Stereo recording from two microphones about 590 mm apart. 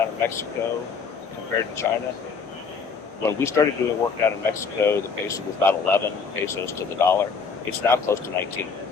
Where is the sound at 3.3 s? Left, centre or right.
Centre.